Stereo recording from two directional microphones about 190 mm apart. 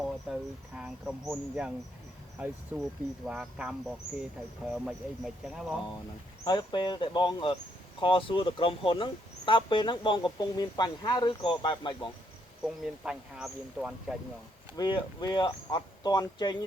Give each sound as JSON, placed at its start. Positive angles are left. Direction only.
{"t": 0.3, "sound": "speech", "side_deg": -5}
{"t": 6.4, "sound": "speech", "side_deg": 20}
{"t": 12.6, "sound": "speech", "side_deg": -5}
{"t": 14.8, "sound": "speech", "side_deg": 20}